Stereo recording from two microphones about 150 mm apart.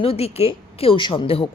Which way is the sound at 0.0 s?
40° left (ahead or behind).